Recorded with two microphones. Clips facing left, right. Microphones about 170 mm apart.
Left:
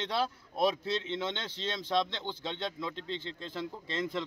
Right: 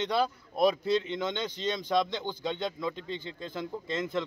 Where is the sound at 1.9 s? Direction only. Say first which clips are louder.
Right 1 dB; centre (ahead or behind).